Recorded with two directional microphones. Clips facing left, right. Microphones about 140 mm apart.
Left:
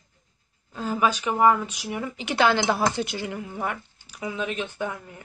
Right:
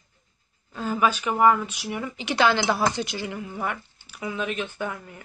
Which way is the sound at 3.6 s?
35° left (ahead or behind).